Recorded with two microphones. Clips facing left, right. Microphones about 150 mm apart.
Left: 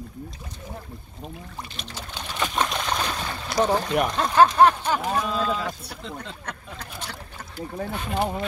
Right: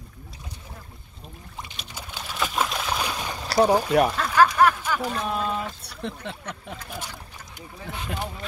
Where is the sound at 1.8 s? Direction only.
10° right (ahead or behind).